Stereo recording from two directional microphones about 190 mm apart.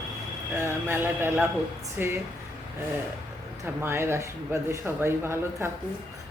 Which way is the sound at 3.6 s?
10° right (ahead or behind).